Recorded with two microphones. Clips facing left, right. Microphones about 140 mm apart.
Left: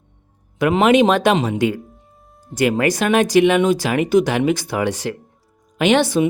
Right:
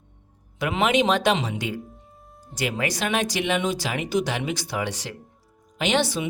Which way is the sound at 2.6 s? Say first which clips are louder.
Left 9 dB; 50° left (ahead or behind).